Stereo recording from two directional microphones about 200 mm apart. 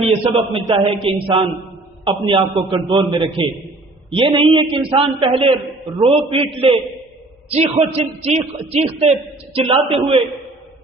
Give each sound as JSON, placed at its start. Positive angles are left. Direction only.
{"t": 0.0, "sound": "a man's voice", "side_deg": -30}
{"t": 2.0, "sound": "a man's voice", "side_deg": -25}